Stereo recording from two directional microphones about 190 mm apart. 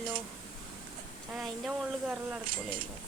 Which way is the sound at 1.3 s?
Centre (ahead or behind).